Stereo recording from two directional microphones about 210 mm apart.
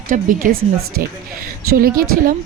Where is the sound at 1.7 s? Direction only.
45° right (ahead or behind).